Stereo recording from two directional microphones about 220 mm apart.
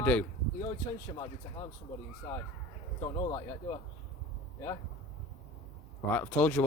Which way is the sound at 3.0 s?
20° left (ahead or behind).